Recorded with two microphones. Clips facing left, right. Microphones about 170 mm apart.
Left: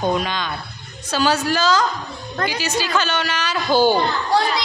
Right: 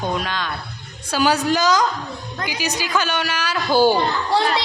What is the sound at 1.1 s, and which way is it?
A woman's voice, 15° right (ahead or behind).